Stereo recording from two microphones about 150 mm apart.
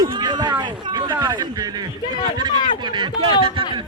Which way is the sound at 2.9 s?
35° right (ahead or behind).